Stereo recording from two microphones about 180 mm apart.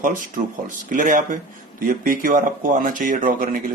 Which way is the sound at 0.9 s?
45° right (ahead or behind).